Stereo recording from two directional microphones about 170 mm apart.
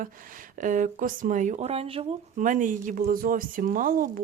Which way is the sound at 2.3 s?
50° right (ahead or behind).